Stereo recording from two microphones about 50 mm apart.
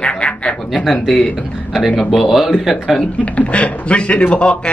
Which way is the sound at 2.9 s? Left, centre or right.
Left.